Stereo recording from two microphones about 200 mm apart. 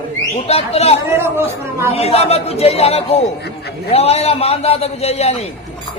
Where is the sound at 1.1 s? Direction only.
10° right (ahead or behind).